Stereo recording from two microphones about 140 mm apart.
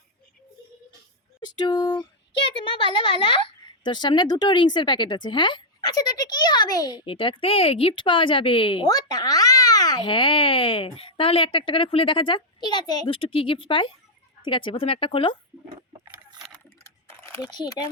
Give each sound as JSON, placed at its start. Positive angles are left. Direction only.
{"t": 1.4, "sound": "speech", "side_deg": 30}
{"t": 8.9, "sound": "a child's voice", "side_deg": 25}
{"t": 16.8, "sound": "a sound", "side_deg": 20}
{"t": 17.5, "sound": "speech", "side_deg": 30}